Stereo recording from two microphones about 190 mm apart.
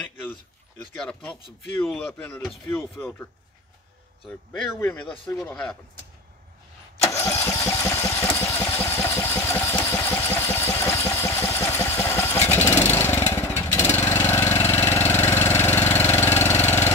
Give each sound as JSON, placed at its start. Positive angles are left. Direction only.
{"t": 1.9, "sound": "speech", "side_deg": 5}
{"t": 4.3, "sound": "speech", "side_deg": 10}
{"t": 5.0, "sound": "speech", "side_deg": 25}
{"t": 5.4, "sound": "speech", "side_deg": 5}
{"t": 7.0, "sound": "engine", "side_deg": 15}
{"t": 12.9, "sound": "lawn mower", "side_deg": 10}
{"t": 13.9, "sound": "engine", "side_deg": 10}